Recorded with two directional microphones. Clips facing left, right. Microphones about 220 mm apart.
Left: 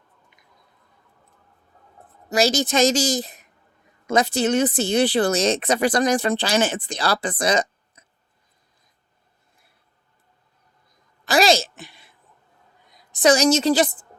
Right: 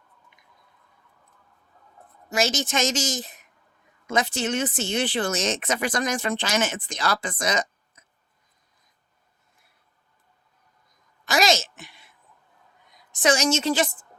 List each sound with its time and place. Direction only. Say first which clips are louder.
2.3 s speech: left 5 dB; 35° left (ahead or behind)
11.3 s a sound: left 4 dB; 35° left (ahead or behind)
12.9 s a woman's voice: left 5 dB; 35° left (ahead or behind)